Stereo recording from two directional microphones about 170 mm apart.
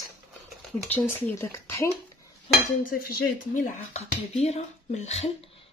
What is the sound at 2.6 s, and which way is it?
Dishes, 55° left (ahead or behind).